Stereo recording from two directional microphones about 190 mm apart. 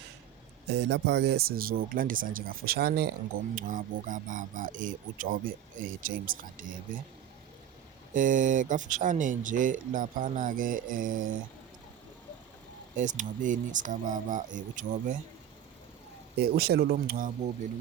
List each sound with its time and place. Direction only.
0.7 s speech: 65° right (ahead or behind); by 6.7 s 45° right (ahead or behind)
8.1 s speech: 45° right (ahead or behind)
13.0 s speech: 40° right (ahead or behind)
16.4 s speech: 55° right (ahead or behind)